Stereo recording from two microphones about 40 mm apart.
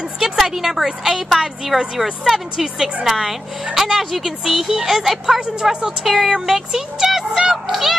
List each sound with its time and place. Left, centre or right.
0.2 s a woman's voice: centre